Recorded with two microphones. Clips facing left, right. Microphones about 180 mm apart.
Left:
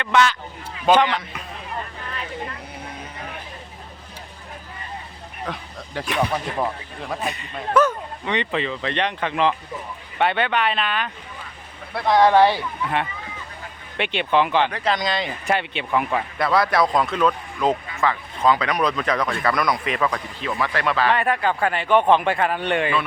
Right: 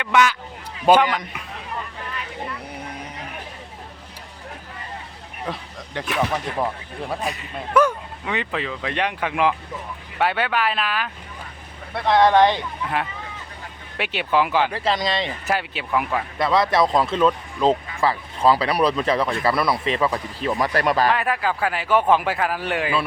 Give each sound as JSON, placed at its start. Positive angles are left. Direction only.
{"t": 0.0, "sound": "speech", "side_deg": -10}
{"t": 5.5, "sound": "speech", "side_deg": 0}
{"t": 12.0, "sound": "speech", "side_deg": 10}
{"t": 13.9, "sound": "speech", "side_deg": -5}
{"t": 16.6, "sound": "speech", "side_deg": -25}
{"t": 20.6, "sound": "speech", "side_deg": -40}
{"t": 21.1, "sound": "speech", "side_deg": -5}